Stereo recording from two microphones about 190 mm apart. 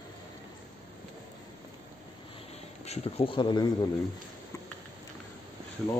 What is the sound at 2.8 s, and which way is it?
Speech, 30° left (ahead or behind).